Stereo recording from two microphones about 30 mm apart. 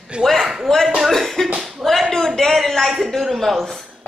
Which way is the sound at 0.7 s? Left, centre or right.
Left.